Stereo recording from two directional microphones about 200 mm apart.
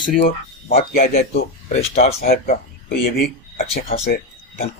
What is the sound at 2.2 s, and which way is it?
Speech, 50° left (ahead or behind).